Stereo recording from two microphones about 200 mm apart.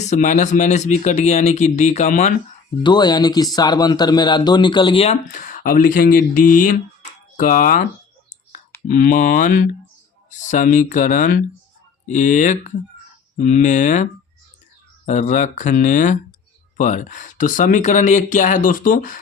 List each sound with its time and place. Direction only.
0.0 s speech: 35° left (ahead or behind)
2.8 s a man's voice: 20° left (ahead or behind)
5.3 s speech: 40° left (ahead or behind)
8.9 s speech: 40° left (ahead or behind)